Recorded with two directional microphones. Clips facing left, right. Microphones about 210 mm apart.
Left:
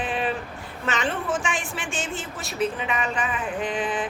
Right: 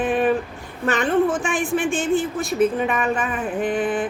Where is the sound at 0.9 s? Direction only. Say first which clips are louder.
Right 8 dB; 55° right (ahead or behind).